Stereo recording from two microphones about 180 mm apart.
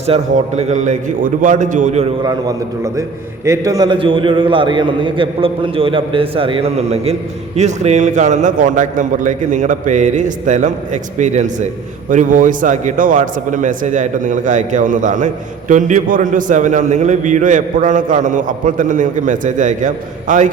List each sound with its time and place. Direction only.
0.0 s a man's voice: 35° right (ahead or behind)
3.4 s a man's voice: 15° right (ahead or behind); by 20.5 s 45° right (ahead or behind)